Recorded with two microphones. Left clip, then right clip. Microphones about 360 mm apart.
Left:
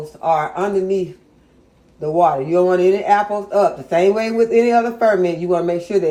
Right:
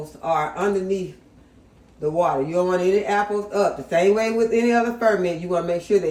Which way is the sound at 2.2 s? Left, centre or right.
Centre.